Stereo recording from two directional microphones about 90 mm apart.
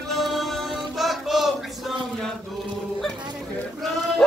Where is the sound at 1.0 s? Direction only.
Centre (ahead or behind).